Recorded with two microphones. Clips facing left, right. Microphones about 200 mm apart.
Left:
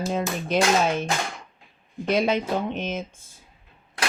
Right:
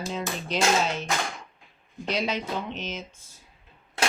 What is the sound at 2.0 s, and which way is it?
Speech, 55° left (ahead or behind).